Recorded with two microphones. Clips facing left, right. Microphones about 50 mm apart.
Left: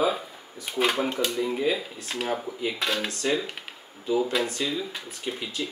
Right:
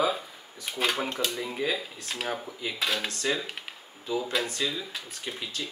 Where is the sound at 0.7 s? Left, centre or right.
Centre.